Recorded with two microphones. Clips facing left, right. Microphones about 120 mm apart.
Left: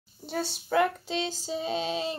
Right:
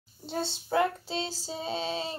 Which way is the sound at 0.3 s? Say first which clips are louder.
Left 1 dB; 25° right (ahead or behind).